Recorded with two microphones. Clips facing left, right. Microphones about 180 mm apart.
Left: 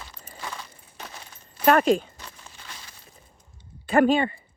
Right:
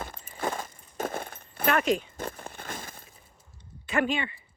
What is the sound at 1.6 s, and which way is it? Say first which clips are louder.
Speech: left 6 dB; 35° left (ahead or behind).